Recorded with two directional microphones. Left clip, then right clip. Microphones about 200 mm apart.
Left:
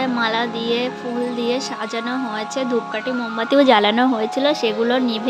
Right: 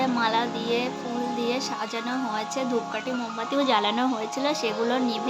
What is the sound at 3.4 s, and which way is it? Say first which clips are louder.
Speech: left 10 dB; 30° left (ahead or behind).